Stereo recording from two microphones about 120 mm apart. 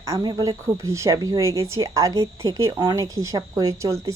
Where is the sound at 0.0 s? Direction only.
30° right (ahead or behind).